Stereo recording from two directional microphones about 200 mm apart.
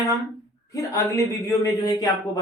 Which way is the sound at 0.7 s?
15° left (ahead or behind).